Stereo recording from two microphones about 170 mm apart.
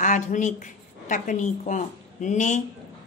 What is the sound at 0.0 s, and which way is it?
A woman's voice, 45° left (ahead or behind).